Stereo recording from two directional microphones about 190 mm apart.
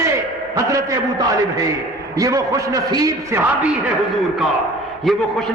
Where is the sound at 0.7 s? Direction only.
15° right (ahead or behind).